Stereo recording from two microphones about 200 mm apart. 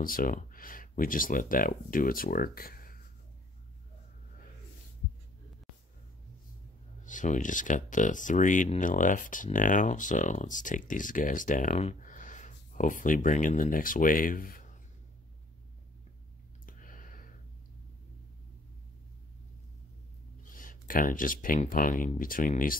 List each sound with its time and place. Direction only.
0.0 s speech: 45° left (ahead or behind)
7.1 s speech: 40° left (ahead or behind)
16.6 s a sound: 45° left (ahead or behind)
20.4 s speech: 45° left (ahead or behind)